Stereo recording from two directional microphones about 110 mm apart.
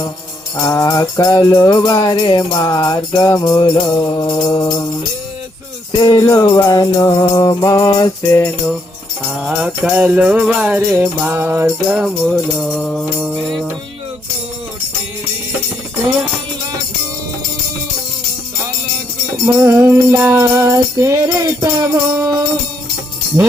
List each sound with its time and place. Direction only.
0.5 s music: 30° left (ahead or behind)
5.9 s music: 35° left (ahead or behind)
8.3 s music: 20° left (ahead or behind)
9.4 s music: 5° right (ahead or behind)
12.0 s music: 5° left (ahead or behind)
19.5 s music: 30° right (ahead or behind)